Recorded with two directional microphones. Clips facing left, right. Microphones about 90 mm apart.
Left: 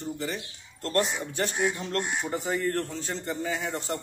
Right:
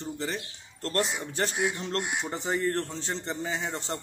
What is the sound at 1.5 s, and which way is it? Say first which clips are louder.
Speech: left 1 dB; 40° left (ahead or behind).